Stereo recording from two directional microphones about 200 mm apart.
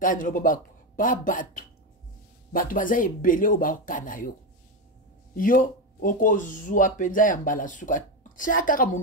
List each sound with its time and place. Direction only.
0.0 s speech: 40° left (ahead or behind)
5.3 s speech: 45° left (ahead or behind)